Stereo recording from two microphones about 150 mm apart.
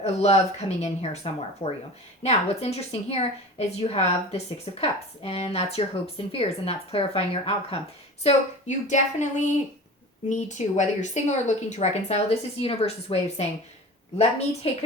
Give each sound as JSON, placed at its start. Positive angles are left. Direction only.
{"t": 0.0, "sound": "a woman's voice", "side_deg": 45}
{"t": 8.2, "sound": "a woman's voice", "side_deg": 50}